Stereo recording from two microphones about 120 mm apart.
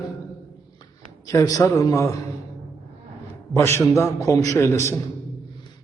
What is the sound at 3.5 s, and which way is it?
A man's voice, 25° left (ahead or behind).